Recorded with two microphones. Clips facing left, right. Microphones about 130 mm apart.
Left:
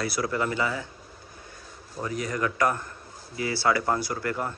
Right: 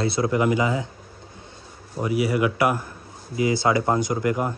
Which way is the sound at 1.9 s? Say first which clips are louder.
Right 8 dB; 10° right (ahead or behind).